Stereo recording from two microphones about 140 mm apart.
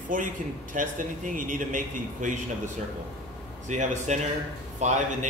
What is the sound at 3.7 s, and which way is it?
A man's voice, 60° right (ahead or behind).